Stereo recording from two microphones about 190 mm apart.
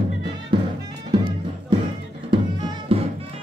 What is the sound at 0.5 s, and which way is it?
Music, 25° right (ahead or behind).